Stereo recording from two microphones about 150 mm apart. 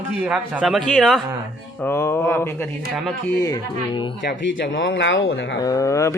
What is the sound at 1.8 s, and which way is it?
Speech, 20° left (ahead or behind).